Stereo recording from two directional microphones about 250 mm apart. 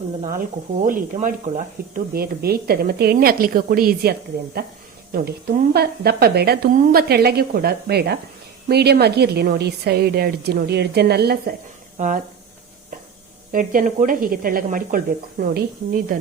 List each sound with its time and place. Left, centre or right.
0.2 s a woman's voice: right
5.1 s a woman's voice: right
13.5 s a woman's voice: right